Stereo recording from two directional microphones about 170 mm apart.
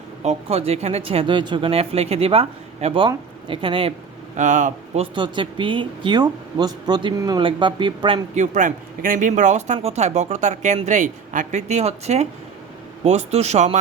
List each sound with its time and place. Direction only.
0.2 s speech: 40° right (ahead or behind)
4.4 s speech: 45° right (ahead or behind)
5.1 s a woman's voice: 30° right (ahead or behind)
8.4 s speech: 50° right (ahead or behind)